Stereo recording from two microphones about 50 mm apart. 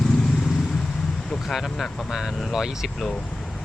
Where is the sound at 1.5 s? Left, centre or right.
Centre.